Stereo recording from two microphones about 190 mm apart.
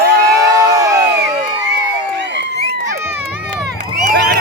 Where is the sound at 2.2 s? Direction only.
70° right (ahead or behind).